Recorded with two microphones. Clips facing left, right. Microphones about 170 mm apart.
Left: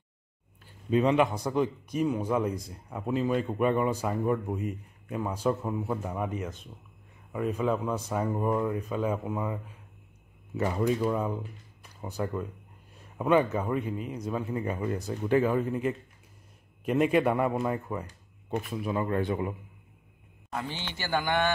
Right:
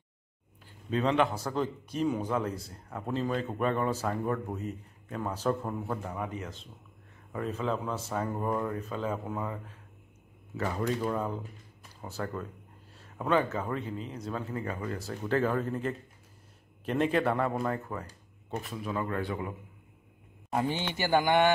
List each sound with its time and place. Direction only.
0.8 s speech: 10° left (ahead or behind)
11.0 s speech: 5° left (ahead or behind)
12.0 s speech: 15° left (ahead or behind)
20.5 s a man's voice: 15° right (ahead or behind)